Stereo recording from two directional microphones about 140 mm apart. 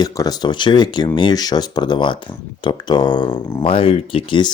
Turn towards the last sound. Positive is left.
turn(degrees=35)  # may be behind; listen again after turning